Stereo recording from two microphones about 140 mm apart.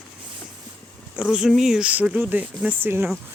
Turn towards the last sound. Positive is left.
turn(degrees=-15)  # may be behind; listen again after turning